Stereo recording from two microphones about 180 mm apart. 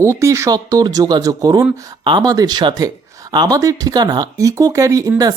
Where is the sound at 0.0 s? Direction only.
15° right (ahead or behind).